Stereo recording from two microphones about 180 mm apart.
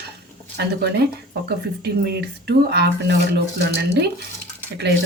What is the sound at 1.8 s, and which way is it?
Speech, 65° right (ahead or behind).